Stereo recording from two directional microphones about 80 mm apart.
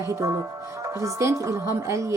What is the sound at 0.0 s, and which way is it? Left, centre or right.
Speech, right.